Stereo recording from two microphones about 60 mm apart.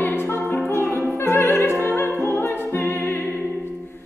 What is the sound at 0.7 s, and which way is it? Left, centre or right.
Music, left.